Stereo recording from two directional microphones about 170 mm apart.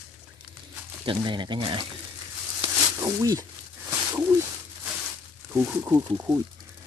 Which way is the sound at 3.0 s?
20° right (ahead or behind).